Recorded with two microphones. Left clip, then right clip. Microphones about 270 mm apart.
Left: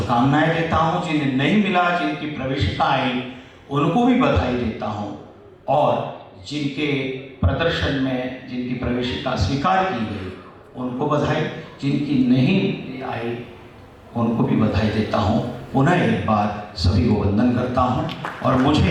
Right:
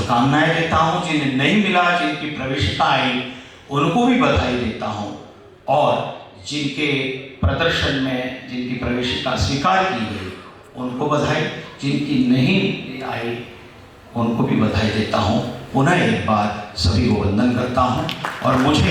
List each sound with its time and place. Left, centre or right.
0.0 s a man's voice: centre
10.8 s a man's voice: centre
11.1 s a man's voice: centre
15.4 s a sound: left
15.8 s a man's voice: centre